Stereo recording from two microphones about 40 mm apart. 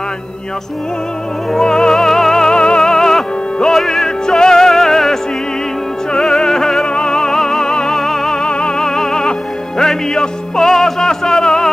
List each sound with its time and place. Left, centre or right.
1.5 s music: centre
2.5 s music: left
6.3 s music: centre